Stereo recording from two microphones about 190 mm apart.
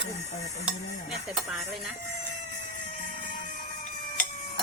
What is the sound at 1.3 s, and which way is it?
Speech, centre (ahead or behind).